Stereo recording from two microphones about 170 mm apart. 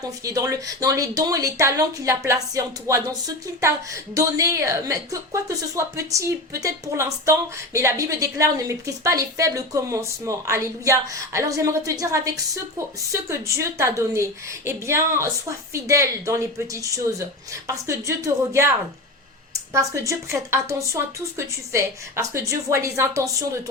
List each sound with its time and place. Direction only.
0.0 s a woman's voice: 20° right (ahead or behind)
19.7 s a woman's voice: 20° right (ahead or behind)